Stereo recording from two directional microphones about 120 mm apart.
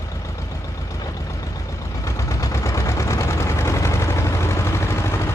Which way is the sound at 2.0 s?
25° left (ahead or behind).